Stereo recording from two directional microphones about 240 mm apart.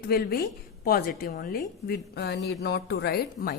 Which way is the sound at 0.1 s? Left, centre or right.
Left.